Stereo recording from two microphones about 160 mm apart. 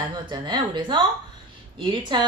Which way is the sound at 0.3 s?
30° right (ahead or behind).